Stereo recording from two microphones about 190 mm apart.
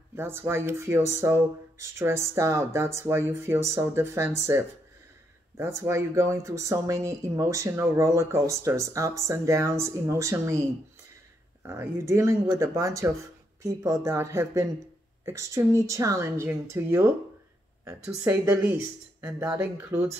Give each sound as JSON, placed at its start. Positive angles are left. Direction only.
{"t": 0.1, "sound": "speech", "side_deg": -10}
{"t": 11.6, "sound": "speech", "side_deg": -15}